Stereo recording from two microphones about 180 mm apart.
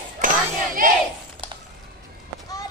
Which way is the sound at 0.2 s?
50° right (ahead or behind).